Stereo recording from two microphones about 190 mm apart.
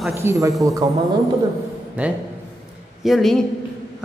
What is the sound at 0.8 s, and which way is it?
Speech, 20° right (ahead or behind).